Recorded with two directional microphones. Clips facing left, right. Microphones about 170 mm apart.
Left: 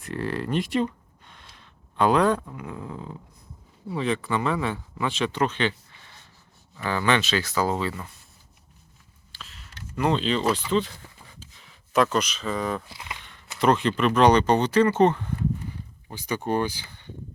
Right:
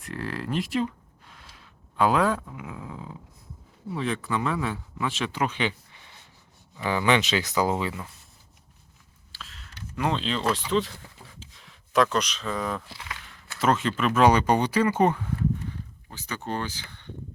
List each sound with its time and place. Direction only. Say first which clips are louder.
0.0 s speech: left 4 dB; centre (ahead or behind)
6.7 s speech: right 1 dB; 15° right (ahead or behind)
9.3 s a sound: even; centre (ahead or behind)
13.6 s speech: left 3 dB; centre (ahead or behind)
16.0 s speech: left 6 dB; 15° left (ahead or behind)